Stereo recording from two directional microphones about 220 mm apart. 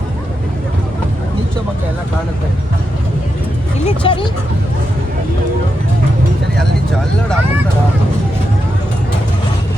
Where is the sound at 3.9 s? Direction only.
25° left (ahead or behind).